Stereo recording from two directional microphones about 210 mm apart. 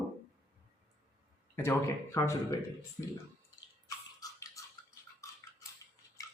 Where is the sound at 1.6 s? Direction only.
10° left (ahead or behind).